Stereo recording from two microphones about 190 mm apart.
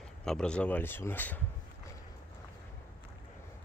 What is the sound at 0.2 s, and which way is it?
Speech, 5° left (ahead or behind).